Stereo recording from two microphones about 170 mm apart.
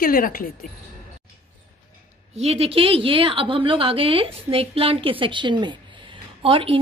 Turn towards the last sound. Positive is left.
turn(degrees=-30)  # may be behind; listen again after turning